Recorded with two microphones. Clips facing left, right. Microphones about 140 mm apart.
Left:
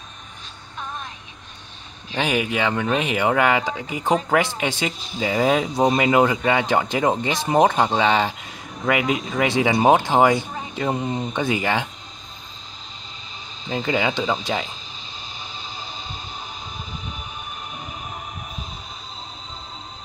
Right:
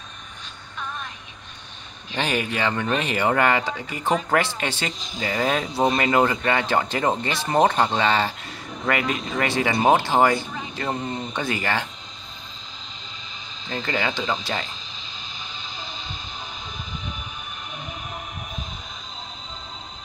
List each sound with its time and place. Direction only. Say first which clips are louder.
2.1 s speech: left 3 dB; 10° left (ahead or behind)
13.7 s speech: left 4 dB; 10° left (ahead or behind)
15.6 s a sound: left 1 dB; 40° left (ahead or behind)